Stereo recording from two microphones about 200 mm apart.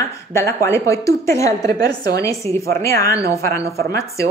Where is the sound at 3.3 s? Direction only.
15° left (ahead or behind).